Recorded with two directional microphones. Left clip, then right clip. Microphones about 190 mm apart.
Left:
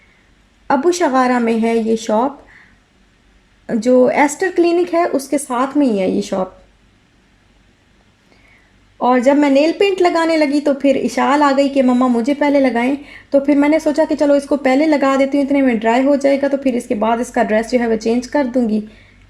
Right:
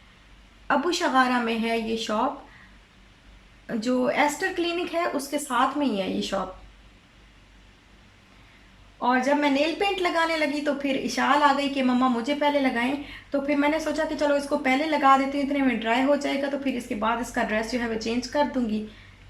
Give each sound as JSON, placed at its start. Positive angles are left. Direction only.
{"t": 0.7, "sound": "a woman's voice", "side_deg": 35}
{"t": 3.7, "sound": "a woman's voice", "side_deg": 35}
{"t": 9.0, "sound": "a woman's voice", "side_deg": 40}